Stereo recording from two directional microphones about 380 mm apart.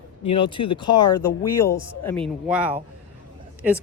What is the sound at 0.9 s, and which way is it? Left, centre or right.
Speech, left.